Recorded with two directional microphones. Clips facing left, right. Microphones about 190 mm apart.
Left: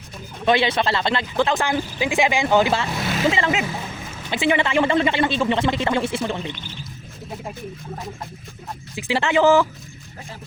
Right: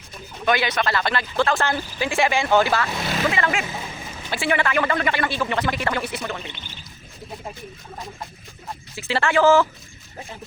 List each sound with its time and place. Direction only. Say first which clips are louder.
0.4 s speech: left 3 dB; 25° left (ahead or behind)
9.0 s speech: left 1 dB; 15° left (ahead or behind)